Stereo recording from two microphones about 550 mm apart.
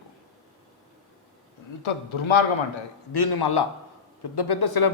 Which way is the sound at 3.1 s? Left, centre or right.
Left.